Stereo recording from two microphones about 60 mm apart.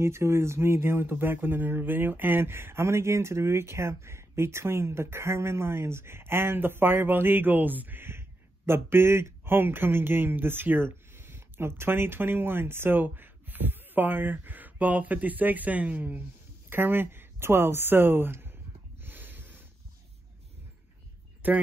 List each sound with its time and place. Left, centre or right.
0.0 s speech: right
16.6 s speech: right
19.0 s a sound: right
21.4 s speech: right